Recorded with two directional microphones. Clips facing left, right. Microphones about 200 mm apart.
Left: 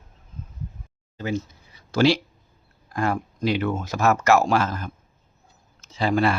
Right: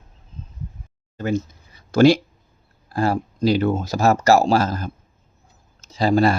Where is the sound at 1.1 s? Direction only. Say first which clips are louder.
Right 4 dB; 50° right (ahead or behind).